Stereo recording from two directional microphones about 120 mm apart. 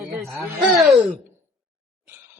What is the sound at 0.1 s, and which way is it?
Speech, centre (ahead or behind).